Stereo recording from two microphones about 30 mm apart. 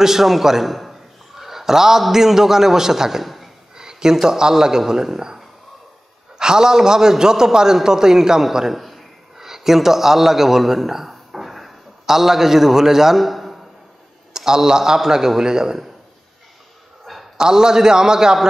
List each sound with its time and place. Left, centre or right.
0.0 s a man's voice: centre
14.3 s a man's voice: centre
17.0 s a sound: centre
17.4 s a man's voice: right